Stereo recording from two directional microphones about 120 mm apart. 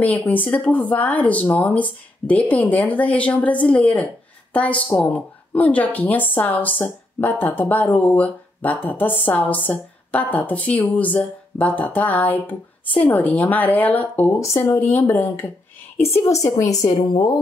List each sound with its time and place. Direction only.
0.0 s a woman's voice: 15° left (ahead or behind)
16.4 s a woman's voice: 25° left (ahead or behind)